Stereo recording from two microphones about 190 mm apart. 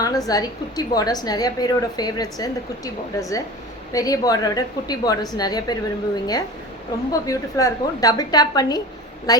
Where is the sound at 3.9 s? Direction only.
20° left (ahead or behind).